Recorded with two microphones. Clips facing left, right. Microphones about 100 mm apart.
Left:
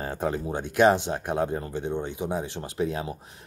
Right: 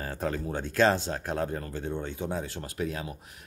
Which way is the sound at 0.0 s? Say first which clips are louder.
Left 3 dB; 20° left (ahead or behind).